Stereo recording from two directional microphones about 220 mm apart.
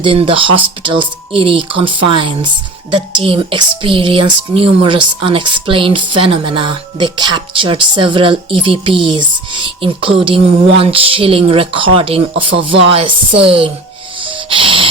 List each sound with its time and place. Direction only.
0.0 s speech: 25° right (ahead or behind)
14.2 s music: 25° right (ahead or behind)